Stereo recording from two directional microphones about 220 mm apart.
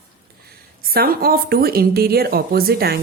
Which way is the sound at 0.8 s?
45° right (ahead or behind).